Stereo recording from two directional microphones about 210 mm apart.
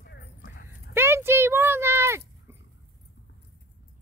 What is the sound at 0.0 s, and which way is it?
Clip-clop, 50° left (ahead or behind).